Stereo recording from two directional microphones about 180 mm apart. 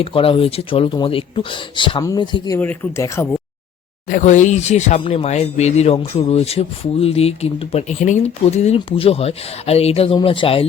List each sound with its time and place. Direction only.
0.0 s speech: 30° left (ahead or behind)
2.6 s speech: 10° left (ahead or behind)
4.1 s speech: 45° left (ahead or behind)